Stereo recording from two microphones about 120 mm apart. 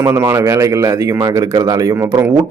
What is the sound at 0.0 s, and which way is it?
Speech, 20° right (ahead or behind).